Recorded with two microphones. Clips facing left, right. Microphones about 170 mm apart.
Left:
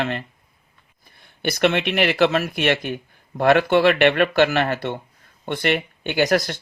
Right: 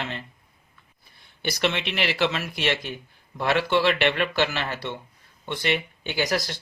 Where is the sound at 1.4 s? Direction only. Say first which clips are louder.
Left 6 dB; 55° left (ahead or behind).